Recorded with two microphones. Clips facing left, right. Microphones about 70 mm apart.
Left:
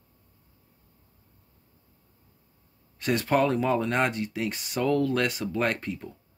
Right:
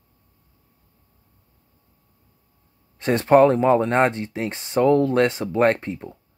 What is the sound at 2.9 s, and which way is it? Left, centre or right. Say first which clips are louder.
Speech: right 9 dB; right.